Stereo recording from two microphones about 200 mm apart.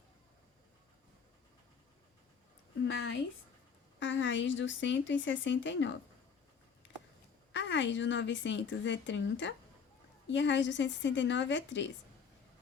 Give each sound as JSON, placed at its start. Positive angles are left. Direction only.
{"t": 2.8, "sound": "a woman's voice", "side_deg": 65}
{"t": 7.5, "sound": "a woman's voice", "side_deg": 65}